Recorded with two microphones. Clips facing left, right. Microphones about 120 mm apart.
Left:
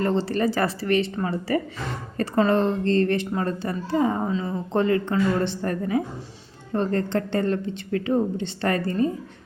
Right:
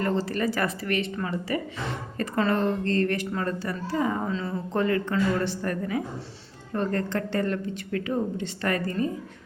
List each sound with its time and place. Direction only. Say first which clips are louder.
0.0 s a woman's voice: left 3 dB; 30° left (ahead or behind)
2.4 s a woman's voice: left 4 dB; 25° left (ahead or behind)
4.3 s a woman's voice: left 3 dB; 20° left (ahead or behind)